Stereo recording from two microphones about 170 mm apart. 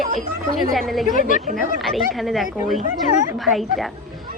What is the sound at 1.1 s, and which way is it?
Speech, 50° left (ahead or behind).